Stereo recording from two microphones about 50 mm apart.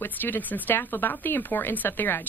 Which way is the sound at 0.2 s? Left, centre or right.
Left.